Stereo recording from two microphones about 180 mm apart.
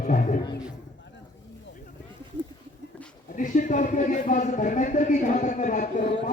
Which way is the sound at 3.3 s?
45° left (ahead or behind).